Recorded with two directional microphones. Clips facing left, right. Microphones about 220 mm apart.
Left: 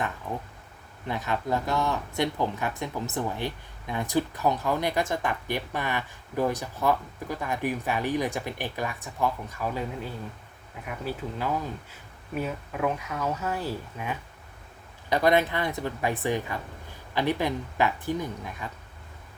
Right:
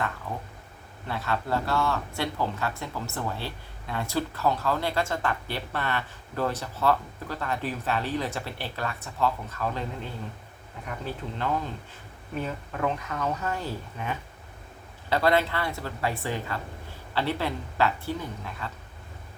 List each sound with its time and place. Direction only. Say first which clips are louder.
1.0 s speech: left 1 dB; 15° left (ahead or behind)